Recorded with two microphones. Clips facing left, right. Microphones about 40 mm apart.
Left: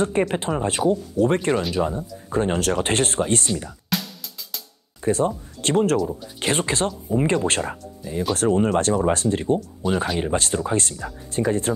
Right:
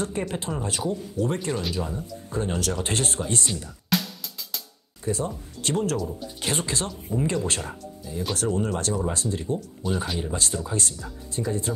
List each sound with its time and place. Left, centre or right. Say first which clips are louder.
0.0 s speech: left 7 dB; left
3.9 s music: right 1 dB; centre
5.0 s speech: left 7 dB; left